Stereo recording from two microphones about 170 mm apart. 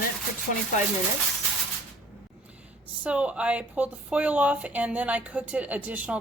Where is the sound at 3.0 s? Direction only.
5° right (ahead or behind).